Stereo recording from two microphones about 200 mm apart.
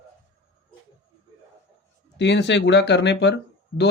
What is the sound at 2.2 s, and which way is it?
Speech, 60° left (ahead or behind).